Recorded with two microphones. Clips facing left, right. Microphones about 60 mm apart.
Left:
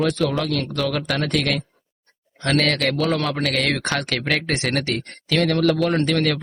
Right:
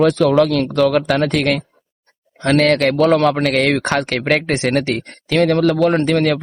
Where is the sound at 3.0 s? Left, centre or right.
Right.